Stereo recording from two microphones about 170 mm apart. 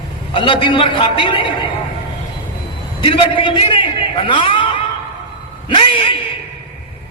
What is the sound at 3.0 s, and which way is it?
A man's voice, 30° left (ahead or behind).